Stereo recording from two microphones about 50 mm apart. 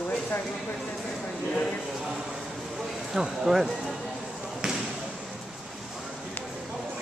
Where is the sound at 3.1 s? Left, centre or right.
Centre.